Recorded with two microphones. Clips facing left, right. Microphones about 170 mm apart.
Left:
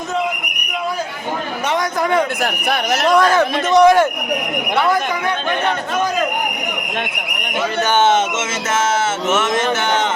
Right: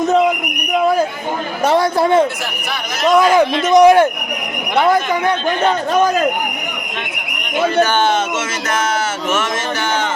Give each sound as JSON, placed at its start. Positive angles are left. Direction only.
{"t": 1.6, "sound": "a man's voice", "side_deg": -30}
{"t": 2.4, "sound": "speech", "side_deg": 55}
{"t": 3.2, "sound": "speech", "side_deg": -10}